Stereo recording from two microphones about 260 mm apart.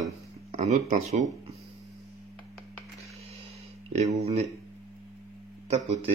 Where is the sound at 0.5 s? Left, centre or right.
Right.